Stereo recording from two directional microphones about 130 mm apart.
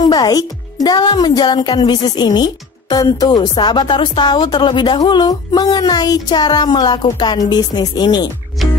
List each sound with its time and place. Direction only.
0.0 s speech: 30° left (ahead or behind)